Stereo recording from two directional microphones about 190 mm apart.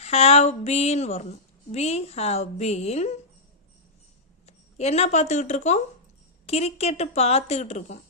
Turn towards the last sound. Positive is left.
turn(degrees=35)  # may be behind; listen again after turning